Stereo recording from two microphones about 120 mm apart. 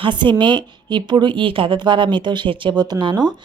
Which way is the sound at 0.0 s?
40° right (ahead or behind).